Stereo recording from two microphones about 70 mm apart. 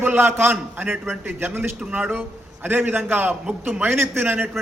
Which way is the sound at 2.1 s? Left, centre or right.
Right.